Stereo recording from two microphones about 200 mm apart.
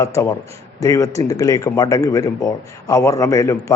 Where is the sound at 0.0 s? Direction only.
15° left (ahead or behind).